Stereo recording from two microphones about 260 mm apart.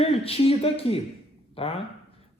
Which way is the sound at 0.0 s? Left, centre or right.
Left.